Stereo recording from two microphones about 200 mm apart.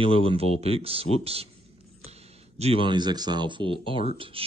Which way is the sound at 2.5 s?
30° right (ahead or behind).